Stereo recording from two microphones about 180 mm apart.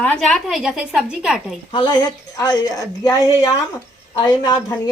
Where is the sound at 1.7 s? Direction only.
25° left (ahead or behind).